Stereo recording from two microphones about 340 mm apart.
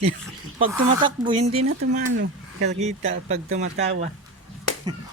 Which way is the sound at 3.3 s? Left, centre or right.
Centre.